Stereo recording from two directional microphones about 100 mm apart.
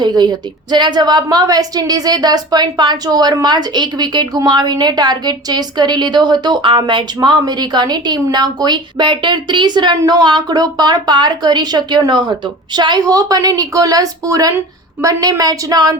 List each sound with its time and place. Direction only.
0.0 s a woman's voice: 45° right (ahead or behind)